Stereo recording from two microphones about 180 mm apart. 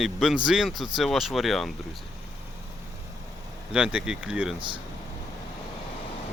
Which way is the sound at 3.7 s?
5° right (ahead or behind).